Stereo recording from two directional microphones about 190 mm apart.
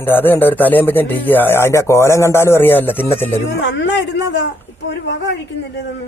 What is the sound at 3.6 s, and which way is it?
Speech, 70° left (ahead or behind).